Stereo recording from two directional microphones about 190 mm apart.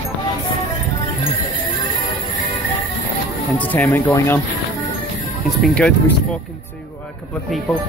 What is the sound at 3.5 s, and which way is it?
Speech, 10° left (ahead or behind).